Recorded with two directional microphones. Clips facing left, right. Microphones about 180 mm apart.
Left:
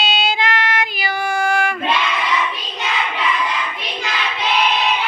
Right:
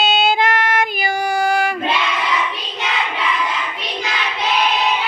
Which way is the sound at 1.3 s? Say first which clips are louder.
Right 1 dB; 35° right (ahead or behind).